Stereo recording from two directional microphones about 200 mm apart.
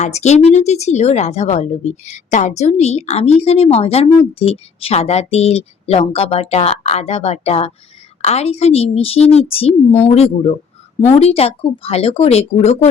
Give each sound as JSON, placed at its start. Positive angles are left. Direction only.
{"t": 0.0, "sound": "a woman's voice", "side_deg": 35}